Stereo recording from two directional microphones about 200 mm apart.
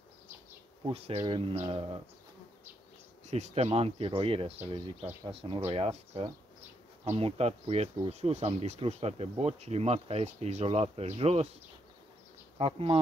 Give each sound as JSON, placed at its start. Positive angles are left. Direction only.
{"t": 0.8, "sound": "speech", "side_deg": -30}
{"t": 3.3, "sound": "speech", "side_deg": -35}
{"t": 12.5, "sound": "speech", "side_deg": -30}